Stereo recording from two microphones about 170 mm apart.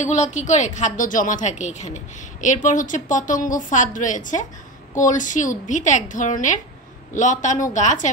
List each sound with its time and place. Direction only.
0.0 s a woman's voice: 45° left (ahead or behind)